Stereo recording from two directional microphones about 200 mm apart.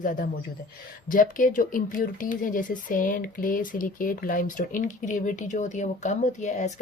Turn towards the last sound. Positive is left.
turn(degrees=35)  # may be behind; listen again after turning